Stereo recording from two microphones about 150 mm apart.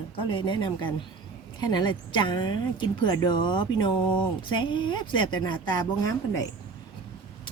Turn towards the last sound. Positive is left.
turn(degrees=20)  # may be behind; listen again after turning